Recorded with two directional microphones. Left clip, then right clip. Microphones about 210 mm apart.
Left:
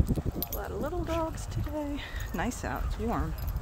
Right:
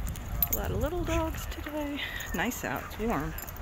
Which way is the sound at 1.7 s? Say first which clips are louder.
Right 2 dB; 5° left (ahead or behind).